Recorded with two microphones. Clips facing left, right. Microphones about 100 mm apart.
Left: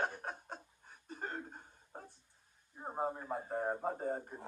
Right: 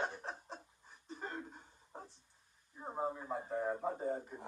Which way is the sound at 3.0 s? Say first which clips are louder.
Left 1 dB; 45° left (ahead or behind).